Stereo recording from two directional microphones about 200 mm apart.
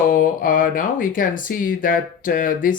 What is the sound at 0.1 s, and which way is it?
Speech, 45° left (ahead or behind).